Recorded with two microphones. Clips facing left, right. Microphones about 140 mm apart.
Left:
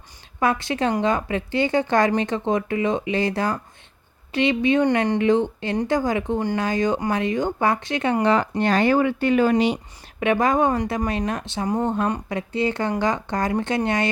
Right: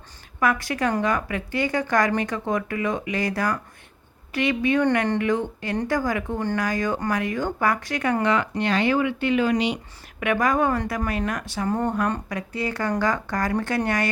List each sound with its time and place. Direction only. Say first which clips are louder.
0.3 s speech: left 1 dB; 25° left (ahead or behind); by 9.7 s 40° left (ahead or behind)
10.2 s speech: left 2 dB; 25° left (ahead or behind)